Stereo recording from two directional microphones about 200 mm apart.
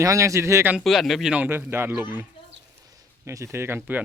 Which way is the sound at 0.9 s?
Centre (ahead or behind).